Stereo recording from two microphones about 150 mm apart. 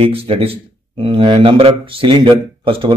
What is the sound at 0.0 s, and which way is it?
Speech, 40° right (ahead or behind).